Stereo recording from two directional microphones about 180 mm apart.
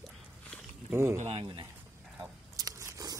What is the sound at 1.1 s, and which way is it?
Speech, 40° right (ahead or behind).